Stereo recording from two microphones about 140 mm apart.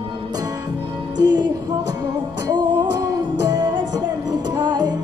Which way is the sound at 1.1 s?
30° right (ahead or behind).